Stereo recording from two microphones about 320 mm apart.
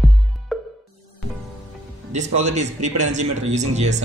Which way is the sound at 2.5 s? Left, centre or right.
Right.